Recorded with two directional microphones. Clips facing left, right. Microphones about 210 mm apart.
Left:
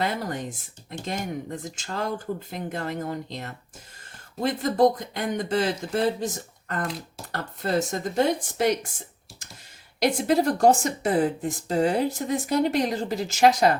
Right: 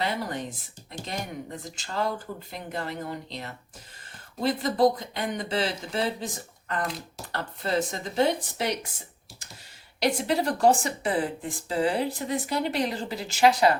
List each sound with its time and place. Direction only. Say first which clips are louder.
0.0 s speech: left 2 dB; 45° left (ahead or behind)
10.0 s speech: left 4 dB; 45° left (ahead or behind)